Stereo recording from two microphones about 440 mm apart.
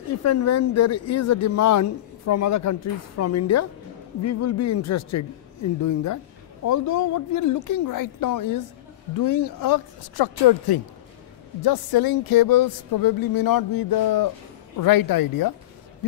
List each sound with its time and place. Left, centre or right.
0.2 s speech: left